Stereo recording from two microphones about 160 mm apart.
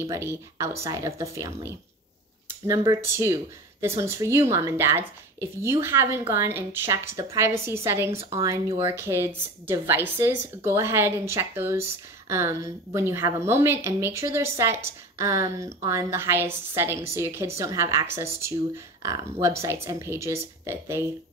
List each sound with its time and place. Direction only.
0.0 s a woman's voice: 15° right (ahead or behind)